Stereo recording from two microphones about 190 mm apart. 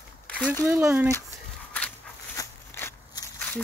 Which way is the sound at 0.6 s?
10° right (ahead or behind).